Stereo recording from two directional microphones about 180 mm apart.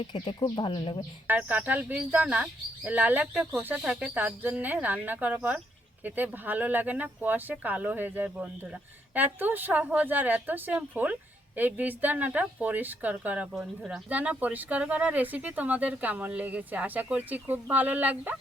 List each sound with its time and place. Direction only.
0.0 s speech: 25° left (ahead or behind)
1.3 s speech: 10° right (ahead or behind)